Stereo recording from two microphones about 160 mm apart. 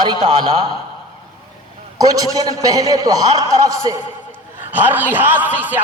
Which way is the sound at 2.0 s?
25° right (ahead or behind).